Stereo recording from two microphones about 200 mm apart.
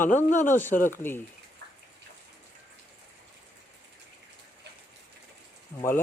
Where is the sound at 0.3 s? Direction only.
40° left (ahead or behind).